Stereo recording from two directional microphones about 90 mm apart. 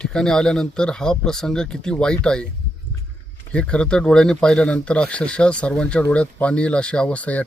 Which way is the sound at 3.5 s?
10° left (ahead or behind).